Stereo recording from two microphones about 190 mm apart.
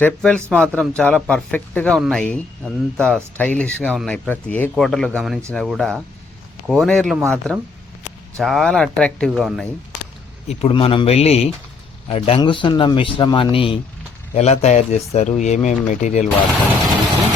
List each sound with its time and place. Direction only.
0.0 s speech: 5° left (ahead or behind)
10.5 s a man's voice: 30° left (ahead or behind)